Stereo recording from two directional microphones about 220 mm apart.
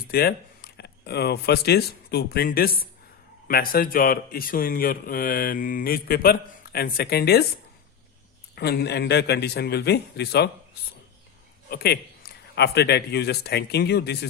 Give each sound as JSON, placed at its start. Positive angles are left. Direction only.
{"t": 0.1, "sound": "a man's voice", "side_deg": 45}
{"t": 8.5, "sound": "a man's voice", "side_deg": 45}
{"t": 11.7, "sound": "a man's voice", "side_deg": 45}